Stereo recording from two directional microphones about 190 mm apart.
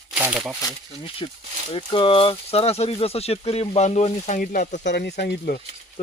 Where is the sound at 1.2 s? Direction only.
25° left (ahead or behind); by 4.8 s 45° left (ahead or behind).